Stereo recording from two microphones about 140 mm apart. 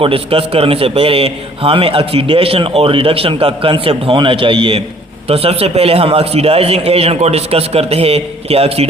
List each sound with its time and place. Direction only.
0.0 s a man's voice: 40° right (ahead or behind)